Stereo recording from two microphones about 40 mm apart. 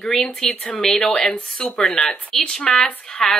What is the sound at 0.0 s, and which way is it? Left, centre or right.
A woman's voice, centre.